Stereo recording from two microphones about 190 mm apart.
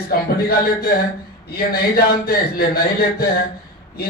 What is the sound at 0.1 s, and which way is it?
Speech, 50° left (ahead or behind).